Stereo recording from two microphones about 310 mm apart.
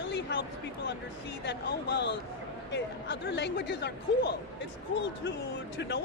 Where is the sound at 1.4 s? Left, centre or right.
Left.